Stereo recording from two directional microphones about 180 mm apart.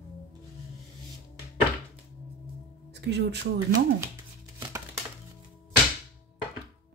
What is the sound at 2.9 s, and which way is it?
Speech, 70° right (ahead or behind).